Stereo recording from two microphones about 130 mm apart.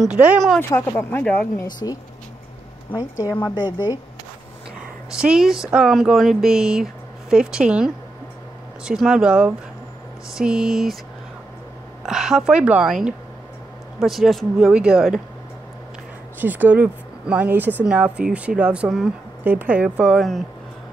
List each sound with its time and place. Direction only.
0.0 s speech: 10° right (ahead or behind)
0.6 s speech: 20° left (ahead or behind)
1.2 s speech: 5° left (ahead or behind)
1.8 s speech: 30° left (ahead or behind)
5.1 s speech: 5° right (ahead or behind)
12.0 s speech: 5° right (ahead or behind)
16.3 s speech: 15° right (ahead or behind)